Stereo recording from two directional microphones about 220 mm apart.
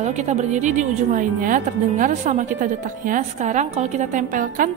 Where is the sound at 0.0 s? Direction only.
30° right (ahead or behind).